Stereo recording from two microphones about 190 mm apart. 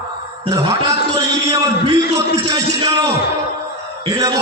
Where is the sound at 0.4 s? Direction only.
20° right (ahead or behind).